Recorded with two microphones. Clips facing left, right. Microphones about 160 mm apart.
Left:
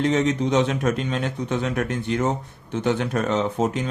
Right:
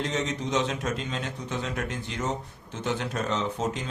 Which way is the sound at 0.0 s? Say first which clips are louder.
Left 9 dB; 60° left (ahead or behind).